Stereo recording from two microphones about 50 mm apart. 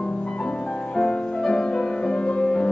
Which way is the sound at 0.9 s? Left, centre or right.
Centre.